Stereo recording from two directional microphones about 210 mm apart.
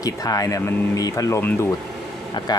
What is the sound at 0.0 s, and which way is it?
Speech, 15° left (ahead or behind).